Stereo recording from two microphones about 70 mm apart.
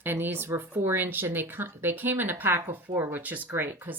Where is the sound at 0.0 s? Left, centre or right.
Right.